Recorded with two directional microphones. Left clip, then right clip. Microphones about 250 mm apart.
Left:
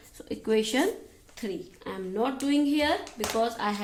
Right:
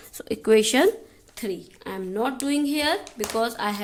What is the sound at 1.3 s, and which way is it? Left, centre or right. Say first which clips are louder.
Speech: right 4 dB; right.